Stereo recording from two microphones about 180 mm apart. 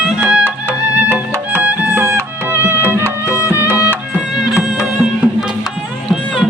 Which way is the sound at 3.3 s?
15° left (ahead or behind).